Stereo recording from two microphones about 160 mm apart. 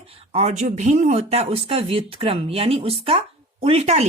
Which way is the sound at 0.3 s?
45° right (ahead or behind).